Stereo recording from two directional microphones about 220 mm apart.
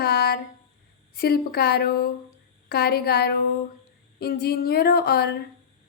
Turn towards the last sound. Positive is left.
turn(degrees=45)  # may be behind; listen again after turning